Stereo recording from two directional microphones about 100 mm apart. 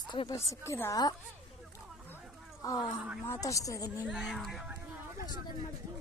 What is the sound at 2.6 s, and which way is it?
Speech, 40° left (ahead or behind).